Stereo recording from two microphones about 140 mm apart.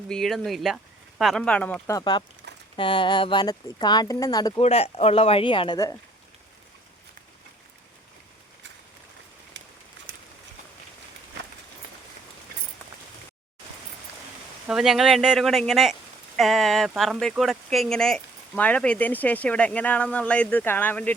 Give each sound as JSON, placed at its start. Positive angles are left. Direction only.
{"t": 0.1, "sound": "speech", "side_deg": 0}
{"t": 1.9, "sound": "speech", "side_deg": 30}
{"t": 4.6, "sound": "speech", "side_deg": 45}
{"t": 14.7, "sound": "speech", "side_deg": -5}